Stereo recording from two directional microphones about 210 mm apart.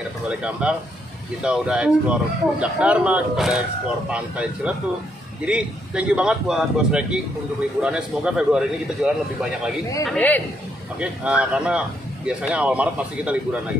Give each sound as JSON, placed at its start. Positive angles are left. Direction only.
{"t": 0.4, "sound": "a man's voice", "side_deg": -5}
{"t": 11.0, "sound": "speech", "side_deg": -5}